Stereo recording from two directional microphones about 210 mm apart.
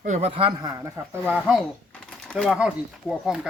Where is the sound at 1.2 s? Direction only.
Centre (ahead or behind).